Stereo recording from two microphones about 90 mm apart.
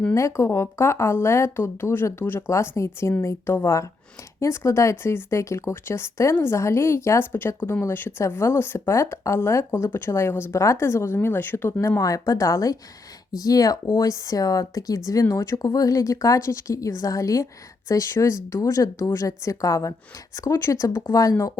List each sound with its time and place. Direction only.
0.1 s speech: 35° left (ahead or behind)